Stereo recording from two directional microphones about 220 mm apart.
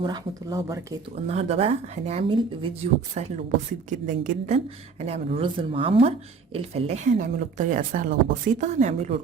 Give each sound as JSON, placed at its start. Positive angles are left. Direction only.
{"t": 0.0, "sound": "speech", "side_deg": -15}
{"t": 1.1, "sound": "a woman's voice", "side_deg": -30}
{"t": 3.8, "sound": "a woman's voice", "side_deg": -35}